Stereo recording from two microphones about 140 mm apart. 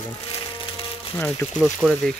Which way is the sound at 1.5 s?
5° right (ahead or behind).